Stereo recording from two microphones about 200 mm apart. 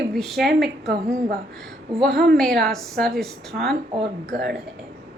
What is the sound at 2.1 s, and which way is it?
Speech, 50° right (ahead or behind).